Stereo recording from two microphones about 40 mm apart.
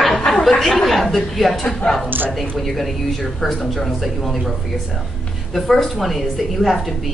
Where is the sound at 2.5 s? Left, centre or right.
Centre.